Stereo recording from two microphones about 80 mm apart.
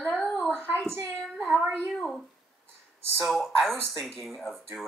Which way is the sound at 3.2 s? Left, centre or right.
Centre.